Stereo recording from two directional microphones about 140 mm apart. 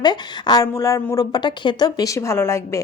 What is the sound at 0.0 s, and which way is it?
Speech, 30° left (ahead or behind).